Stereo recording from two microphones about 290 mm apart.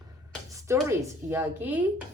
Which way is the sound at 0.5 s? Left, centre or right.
Centre.